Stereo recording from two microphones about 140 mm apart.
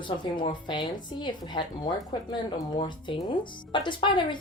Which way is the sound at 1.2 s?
30° left (ahead or behind).